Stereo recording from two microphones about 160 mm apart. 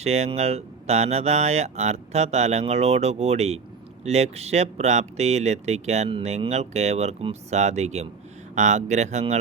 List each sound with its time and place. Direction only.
0.0 s speech: 40° right (ahead or behind)